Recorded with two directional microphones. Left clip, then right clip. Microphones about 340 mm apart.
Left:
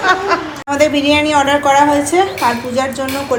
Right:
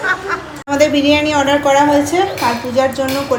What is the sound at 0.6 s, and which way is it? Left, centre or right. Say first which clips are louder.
A woman's voice: right 1 dB; centre.